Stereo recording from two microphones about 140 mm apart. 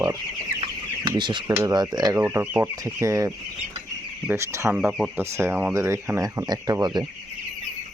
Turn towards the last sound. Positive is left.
turn(degrees=-30)  # may be behind; listen again after turning